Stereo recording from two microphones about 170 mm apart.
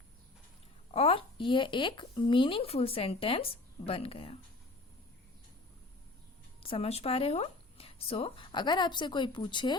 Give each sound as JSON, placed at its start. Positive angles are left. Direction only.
{"t": 0.9, "sound": "speech", "side_deg": 35}
{"t": 6.6, "sound": "speech", "side_deg": 35}